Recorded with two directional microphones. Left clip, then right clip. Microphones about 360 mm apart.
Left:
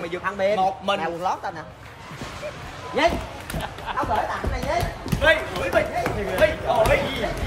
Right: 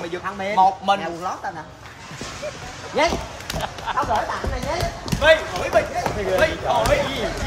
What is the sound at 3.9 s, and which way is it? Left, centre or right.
Music, right.